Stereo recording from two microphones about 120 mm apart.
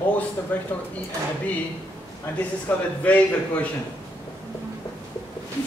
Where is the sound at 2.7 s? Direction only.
15° left (ahead or behind).